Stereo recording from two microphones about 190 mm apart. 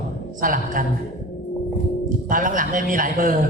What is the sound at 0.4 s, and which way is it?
Speech, 45° right (ahead or behind).